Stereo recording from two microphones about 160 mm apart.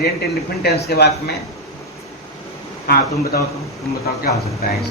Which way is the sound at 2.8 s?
75° left (ahead or behind).